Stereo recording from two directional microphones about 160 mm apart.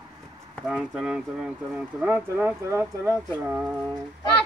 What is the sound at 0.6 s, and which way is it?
Speech, 5° right (ahead or behind).